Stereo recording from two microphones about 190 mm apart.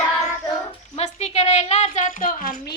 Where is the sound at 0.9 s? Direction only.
35° left (ahead or behind).